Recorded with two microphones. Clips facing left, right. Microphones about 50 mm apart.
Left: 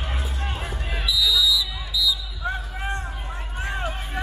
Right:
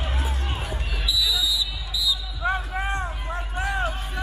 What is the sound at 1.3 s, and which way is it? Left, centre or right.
Basketball bounce, right.